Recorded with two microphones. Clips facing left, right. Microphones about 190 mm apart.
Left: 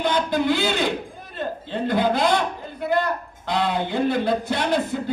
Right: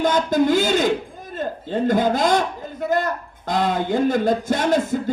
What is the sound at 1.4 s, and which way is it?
Speech, 45° right (ahead or behind).